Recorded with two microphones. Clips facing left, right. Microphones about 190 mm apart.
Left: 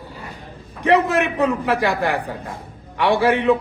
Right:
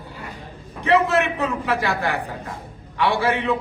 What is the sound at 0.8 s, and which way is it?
A man's voice, 15° left (ahead or behind).